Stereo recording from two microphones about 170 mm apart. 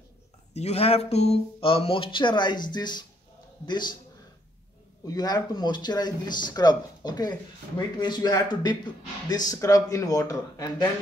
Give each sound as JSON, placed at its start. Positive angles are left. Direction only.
{"t": 0.6, "sound": "speech", "side_deg": 40}
{"t": 5.0, "sound": "speech", "side_deg": 25}